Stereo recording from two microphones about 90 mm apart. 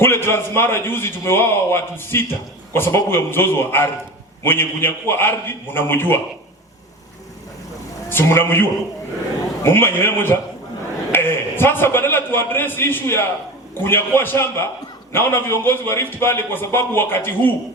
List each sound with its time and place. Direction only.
0.0 s a man's voice: 25° left (ahead or behind)
8.1 s a man's voice: 25° left (ahead or behind)
9.6 s a man's voice: 25° left (ahead or behind)